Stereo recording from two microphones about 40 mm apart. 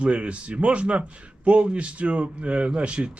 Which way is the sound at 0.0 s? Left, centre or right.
Right.